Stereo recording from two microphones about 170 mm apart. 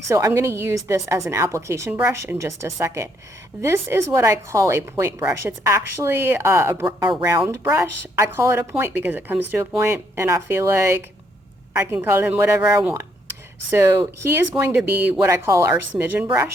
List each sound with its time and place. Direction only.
0.1 s a woman's voice: 20° right (ahead or behind)